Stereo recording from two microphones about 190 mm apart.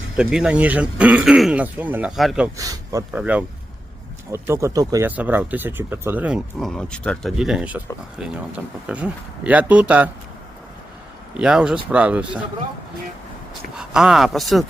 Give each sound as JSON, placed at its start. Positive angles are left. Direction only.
{"t": 0.2, "sound": "speech", "side_deg": -5}
{"t": 2.6, "sound": "speech", "side_deg": -20}
{"t": 3.1, "sound": "speech", "side_deg": -5}
{"t": 11.3, "sound": "speech", "side_deg": -5}
{"t": 13.5, "sound": "speech", "side_deg": -5}